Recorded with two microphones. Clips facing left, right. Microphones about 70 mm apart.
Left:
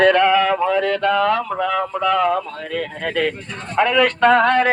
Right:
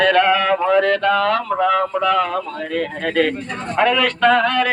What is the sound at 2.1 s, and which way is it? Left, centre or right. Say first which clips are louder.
Speech: left 3 dB; centre.